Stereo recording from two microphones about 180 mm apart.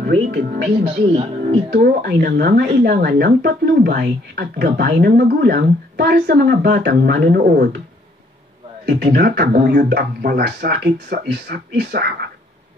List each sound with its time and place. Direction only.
0.0 s speech: 60° right (ahead or behind)
1.7 s speech: 60° right (ahead or behind)
8.8 s speech: 65° right (ahead or behind)